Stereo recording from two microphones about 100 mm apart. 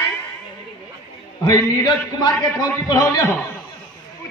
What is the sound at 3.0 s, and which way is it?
Speech, 25° left (ahead or behind).